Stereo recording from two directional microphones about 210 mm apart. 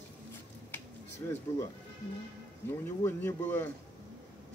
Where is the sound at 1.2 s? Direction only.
20° left (ahead or behind).